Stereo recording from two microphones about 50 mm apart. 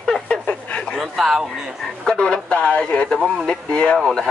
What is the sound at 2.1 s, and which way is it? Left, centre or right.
Speech, centre.